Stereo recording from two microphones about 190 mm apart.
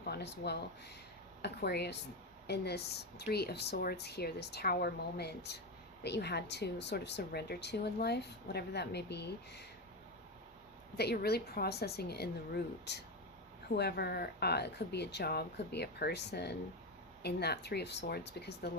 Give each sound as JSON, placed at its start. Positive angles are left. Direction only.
{"t": 0.0, "sound": "speech", "side_deg": 60}
{"t": 10.9, "sound": "speech", "side_deg": 55}